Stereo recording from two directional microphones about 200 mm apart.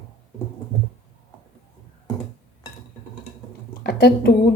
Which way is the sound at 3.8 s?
55° left (ahead or behind).